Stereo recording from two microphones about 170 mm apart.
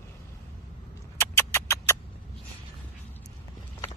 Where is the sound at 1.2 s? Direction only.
15° left (ahead or behind).